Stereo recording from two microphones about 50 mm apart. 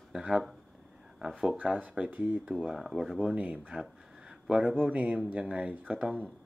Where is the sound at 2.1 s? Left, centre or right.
Right.